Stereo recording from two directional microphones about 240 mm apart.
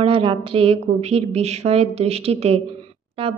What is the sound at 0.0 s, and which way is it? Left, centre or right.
A woman's voice, right.